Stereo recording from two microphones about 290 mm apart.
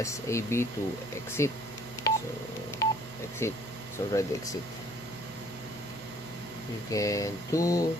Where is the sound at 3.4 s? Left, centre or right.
Centre.